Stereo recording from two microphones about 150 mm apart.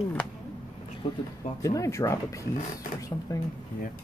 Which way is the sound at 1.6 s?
20° left (ahead or behind).